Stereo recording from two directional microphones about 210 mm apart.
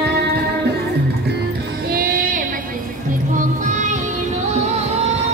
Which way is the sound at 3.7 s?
35° right (ahead or behind).